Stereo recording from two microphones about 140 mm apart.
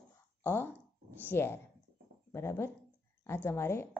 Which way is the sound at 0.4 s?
15° left (ahead or behind).